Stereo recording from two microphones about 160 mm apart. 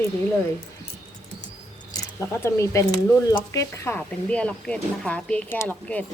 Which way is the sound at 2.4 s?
20° left (ahead or behind).